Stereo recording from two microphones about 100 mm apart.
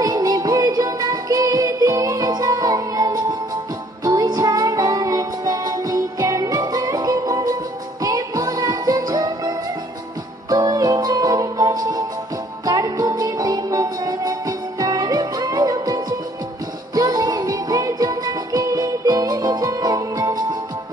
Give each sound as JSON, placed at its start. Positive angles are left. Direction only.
{"t": 0.0, "sound": "music", "side_deg": -40}
{"t": 10.5, "sound": "music", "side_deg": -40}